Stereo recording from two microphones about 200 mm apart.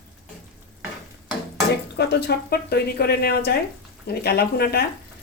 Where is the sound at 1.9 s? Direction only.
55° left (ahead or behind).